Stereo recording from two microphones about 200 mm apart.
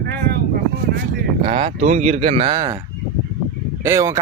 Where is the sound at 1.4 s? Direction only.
30° right (ahead or behind).